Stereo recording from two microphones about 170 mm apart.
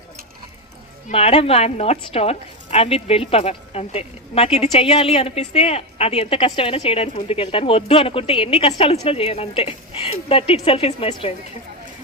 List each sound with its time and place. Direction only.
1.1 s speech: 35° left (ahead or behind)